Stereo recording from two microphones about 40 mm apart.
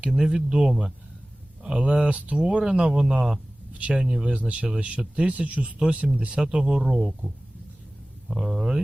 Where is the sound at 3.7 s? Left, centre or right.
Right.